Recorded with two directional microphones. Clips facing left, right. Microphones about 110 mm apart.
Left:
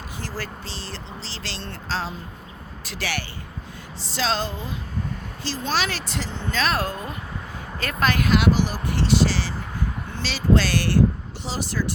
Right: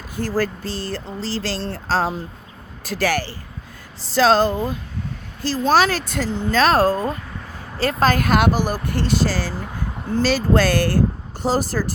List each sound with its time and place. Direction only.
0.2 s speech: 45° right (ahead or behind)